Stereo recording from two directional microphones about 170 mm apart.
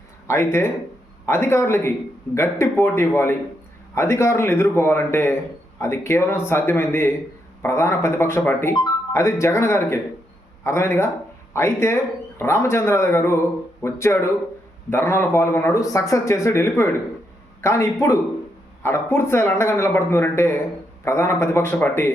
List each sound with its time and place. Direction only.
0.3 s speech: 15° left (ahead or behind)